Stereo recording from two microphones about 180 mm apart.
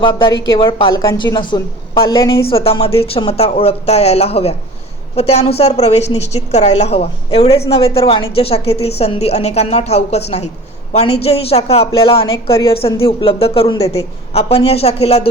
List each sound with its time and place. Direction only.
0.0 s a woman's voice: 25° left (ahead or behind)